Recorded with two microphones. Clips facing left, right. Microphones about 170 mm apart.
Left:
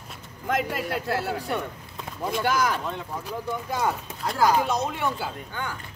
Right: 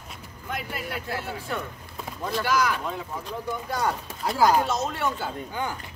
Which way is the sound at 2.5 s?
50° left (ahead or behind).